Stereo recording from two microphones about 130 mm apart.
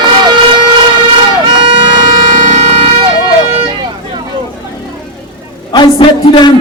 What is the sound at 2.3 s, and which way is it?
Vehicle, 65° right (ahead or behind).